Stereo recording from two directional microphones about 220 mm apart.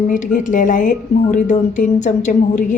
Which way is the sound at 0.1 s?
35° left (ahead or behind).